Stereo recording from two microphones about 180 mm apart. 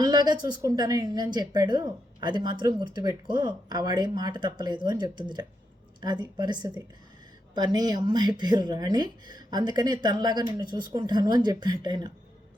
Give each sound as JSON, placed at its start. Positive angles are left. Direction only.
{"t": 0.0, "sound": "a woman's voice", "side_deg": -25}